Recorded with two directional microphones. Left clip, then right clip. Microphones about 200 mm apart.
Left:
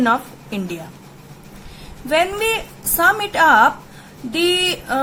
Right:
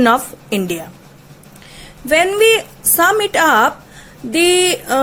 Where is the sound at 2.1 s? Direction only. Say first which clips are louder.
Right 6 dB; 35° right (ahead or behind).